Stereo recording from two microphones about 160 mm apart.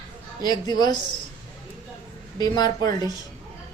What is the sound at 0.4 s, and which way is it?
Speech, 25° left (ahead or behind).